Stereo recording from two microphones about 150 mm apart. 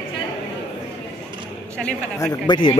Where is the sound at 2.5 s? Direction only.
30° left (ahead or behind).